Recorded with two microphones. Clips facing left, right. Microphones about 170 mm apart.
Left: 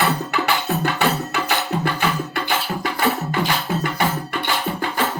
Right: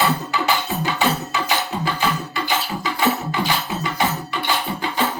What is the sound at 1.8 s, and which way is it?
Music, 60° left (ahead or behind).